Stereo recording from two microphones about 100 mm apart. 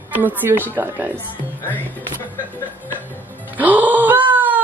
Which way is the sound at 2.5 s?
20° left (ahead or behind).